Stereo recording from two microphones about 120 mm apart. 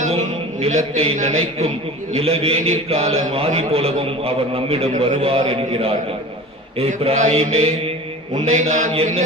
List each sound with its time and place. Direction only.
0.6 s a man's voice: 55° right (ahead or behind)
8.3 s a man's voice: 75° right (ahead or behind)